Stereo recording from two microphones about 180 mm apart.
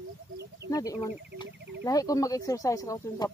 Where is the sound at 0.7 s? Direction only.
20° left (ahead or behind).